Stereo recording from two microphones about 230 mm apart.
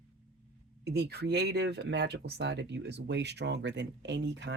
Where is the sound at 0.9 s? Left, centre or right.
Right.